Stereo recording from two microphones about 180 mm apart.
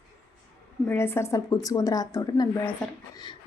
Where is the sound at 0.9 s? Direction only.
15° left (ahead or behind).